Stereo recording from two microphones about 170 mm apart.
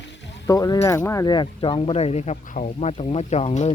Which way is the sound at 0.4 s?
20° left (ahead or behind).